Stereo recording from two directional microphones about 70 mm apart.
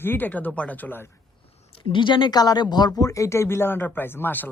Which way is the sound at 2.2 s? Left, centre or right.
Left.